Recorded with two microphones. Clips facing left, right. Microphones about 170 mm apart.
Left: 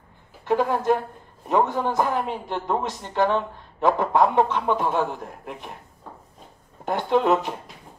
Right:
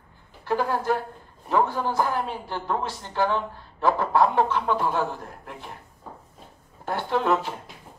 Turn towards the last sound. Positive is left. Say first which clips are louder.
# left 4 dB
turn(degrees=20)  # may be behind; listen again after turning